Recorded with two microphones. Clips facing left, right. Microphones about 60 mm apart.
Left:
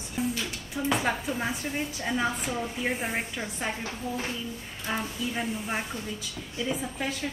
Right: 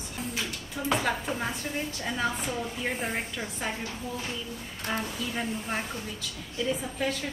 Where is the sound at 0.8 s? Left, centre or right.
Centre.